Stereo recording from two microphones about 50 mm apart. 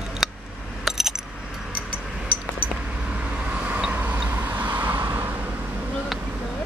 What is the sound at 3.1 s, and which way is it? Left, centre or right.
Vehicle, right.